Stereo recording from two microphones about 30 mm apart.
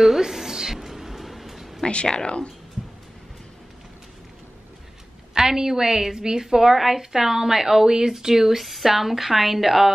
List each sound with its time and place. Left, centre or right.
0.0 s a sound: centre
2.0 s speech: left
5.3 s a woman's voice: centre
6.4 s a woman's voice: centre